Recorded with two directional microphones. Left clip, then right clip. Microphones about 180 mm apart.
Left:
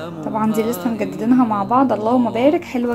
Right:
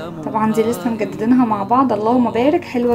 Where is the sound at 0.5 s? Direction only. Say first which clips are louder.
Right 2 dB; centre (ahead or behind).